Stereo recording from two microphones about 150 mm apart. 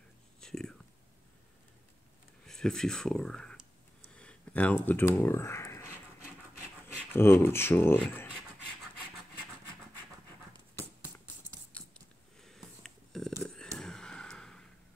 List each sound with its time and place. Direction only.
0.4 s whispering: 5° left (ahead or behind)
2.4 s speech: 5° left (ahead or behind)
4.1 s a sound: 10° left (ahead or behind)
4.8 s speech: 10° left (ahead or behind)
7.0 s speech: 15° left (ahead or behind)
11.7 s scissors: 10° left (ahead or behind)
12.4 s a sound: centre (ahead or behind)